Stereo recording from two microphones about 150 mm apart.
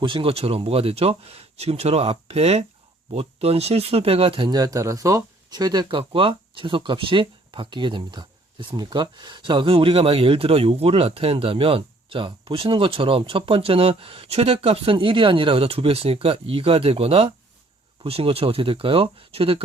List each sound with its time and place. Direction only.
0.0 s speech: 35° right (ahead or behind)